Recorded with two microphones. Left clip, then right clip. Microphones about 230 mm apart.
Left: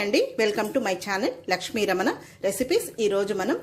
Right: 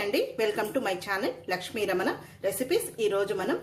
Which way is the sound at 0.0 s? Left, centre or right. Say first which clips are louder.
Left 4 dB; left.